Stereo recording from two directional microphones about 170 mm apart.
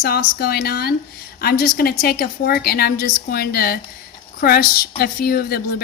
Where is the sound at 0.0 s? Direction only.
70° left (ahead or behind).